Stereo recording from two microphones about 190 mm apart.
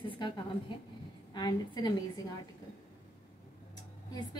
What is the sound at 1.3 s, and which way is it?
Speech, 20° left (ahead or behind).